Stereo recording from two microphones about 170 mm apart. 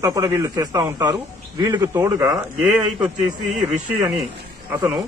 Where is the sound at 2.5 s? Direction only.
5° right (ahead or behind).